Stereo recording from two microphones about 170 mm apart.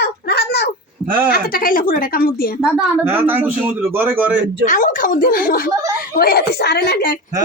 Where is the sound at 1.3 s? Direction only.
60° left (ahead or behind).